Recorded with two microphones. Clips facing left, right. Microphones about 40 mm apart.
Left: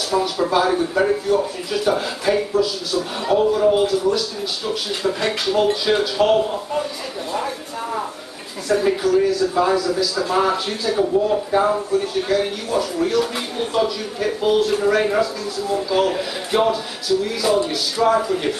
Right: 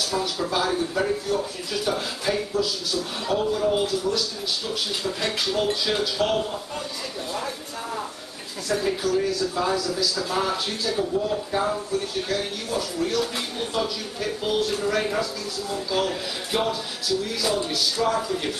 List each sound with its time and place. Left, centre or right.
0.1 s speech: centre
16.5 s speech: centre